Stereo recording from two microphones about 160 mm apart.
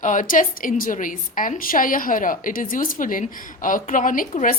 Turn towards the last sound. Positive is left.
turn(degrees=50)  # may be behind; listen again after turning